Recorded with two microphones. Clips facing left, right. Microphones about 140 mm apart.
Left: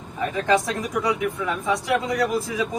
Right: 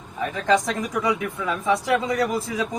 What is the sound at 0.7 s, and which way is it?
A man's voice, centre (ahead or behind).